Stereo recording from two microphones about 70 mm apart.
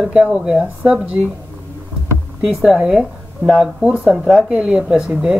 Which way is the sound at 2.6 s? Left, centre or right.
Centre.